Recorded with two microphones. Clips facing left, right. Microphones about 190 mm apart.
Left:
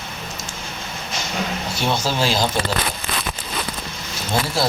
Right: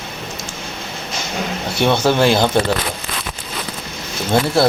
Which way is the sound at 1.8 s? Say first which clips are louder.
Right 8 dB; 60° right (ahead or behind).